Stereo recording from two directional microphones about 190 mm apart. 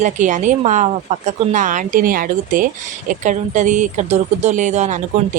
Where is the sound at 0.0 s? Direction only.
40° right (ahead or behind).